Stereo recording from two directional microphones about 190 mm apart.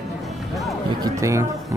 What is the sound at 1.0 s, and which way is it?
Speech, 15° right (ahead or behind).